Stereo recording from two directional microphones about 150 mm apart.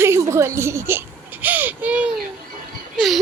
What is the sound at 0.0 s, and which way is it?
Whimper, 20° right (ahead or behind).